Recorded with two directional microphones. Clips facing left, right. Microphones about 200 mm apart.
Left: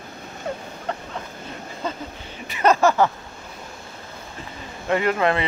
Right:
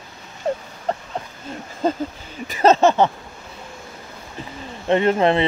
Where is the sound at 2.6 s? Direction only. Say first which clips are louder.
Right 3 dB; 25° right (ahead or behind).